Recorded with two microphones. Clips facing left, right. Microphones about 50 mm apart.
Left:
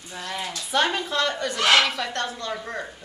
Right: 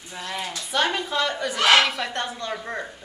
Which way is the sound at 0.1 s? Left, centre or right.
Centre.